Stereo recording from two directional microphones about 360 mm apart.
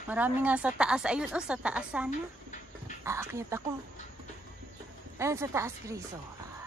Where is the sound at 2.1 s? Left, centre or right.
Centre.